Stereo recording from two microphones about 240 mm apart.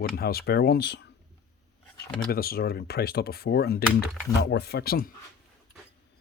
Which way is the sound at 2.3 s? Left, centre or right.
Left.